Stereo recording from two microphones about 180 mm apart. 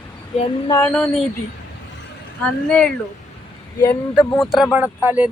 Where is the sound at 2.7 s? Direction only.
5° left (ahead or behind).